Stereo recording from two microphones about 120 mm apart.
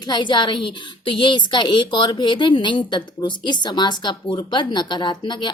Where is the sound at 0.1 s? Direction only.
40° left (ahead or behind).